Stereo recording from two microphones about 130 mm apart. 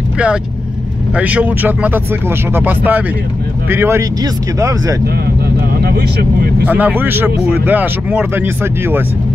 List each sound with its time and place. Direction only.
1.1 s speech: 10° right (ahead or behind)
6.6 s speech: 10° right (ahead or behind)